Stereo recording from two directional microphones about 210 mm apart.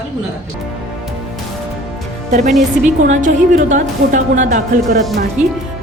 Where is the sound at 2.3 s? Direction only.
35° right (ahead or behind).